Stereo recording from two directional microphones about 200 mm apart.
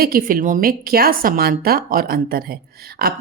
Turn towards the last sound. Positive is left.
turn(degrees=-50)  # may be behind; listen again after turning